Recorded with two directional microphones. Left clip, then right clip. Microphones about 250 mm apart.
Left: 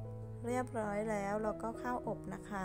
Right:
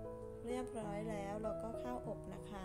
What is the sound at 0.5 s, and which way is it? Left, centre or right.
Speech, centre.